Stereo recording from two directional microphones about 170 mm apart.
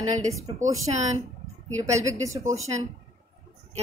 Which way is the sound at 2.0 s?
20° right (ahead or behind).